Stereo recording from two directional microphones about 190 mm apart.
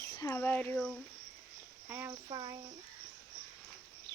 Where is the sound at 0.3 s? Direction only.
10° left (ahead or behind).